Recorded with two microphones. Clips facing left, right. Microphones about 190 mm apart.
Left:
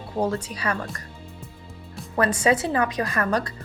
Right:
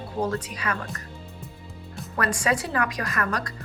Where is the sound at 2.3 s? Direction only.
25° left (ahead or behind).